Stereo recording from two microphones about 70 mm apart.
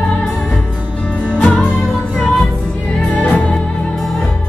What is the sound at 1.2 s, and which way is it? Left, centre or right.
Music, centre.